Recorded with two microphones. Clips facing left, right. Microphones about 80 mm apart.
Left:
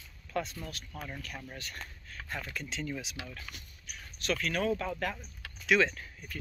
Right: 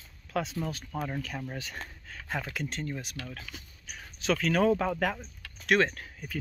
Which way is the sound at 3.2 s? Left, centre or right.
Centre.